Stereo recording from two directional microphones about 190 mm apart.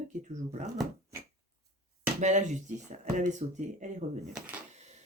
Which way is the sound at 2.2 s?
40° right (ahead or behind).